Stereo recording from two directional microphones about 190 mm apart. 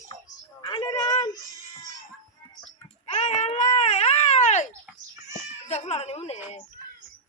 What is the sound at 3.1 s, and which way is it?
Baby cry, 35° left (ahead or behind).